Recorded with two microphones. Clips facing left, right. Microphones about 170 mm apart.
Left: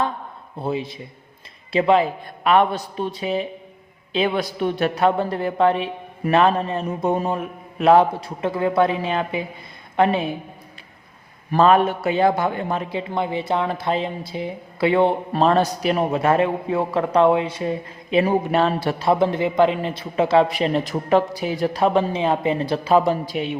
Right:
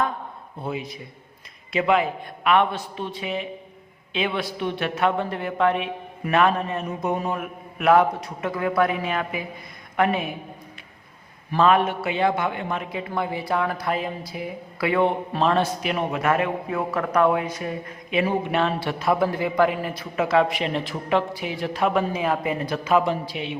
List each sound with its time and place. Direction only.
0.6 s a man's voice: 30° left (ahead or behind)
11.5 s a man's voice: 35° left (ahead or behind)
23.2 s a man's voice: 45° left (ahead or behind)